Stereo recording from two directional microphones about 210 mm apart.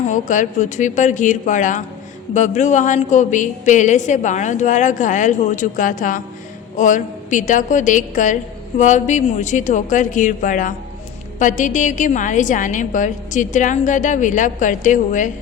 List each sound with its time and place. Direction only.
0.1 s a woman's voice: 35° left (ahead or behind)